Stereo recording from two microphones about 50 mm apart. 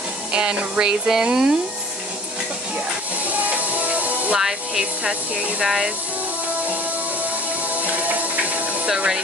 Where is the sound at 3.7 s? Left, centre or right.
Right.